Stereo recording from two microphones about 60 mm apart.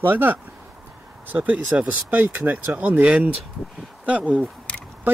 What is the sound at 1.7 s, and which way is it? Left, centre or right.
Speech, right.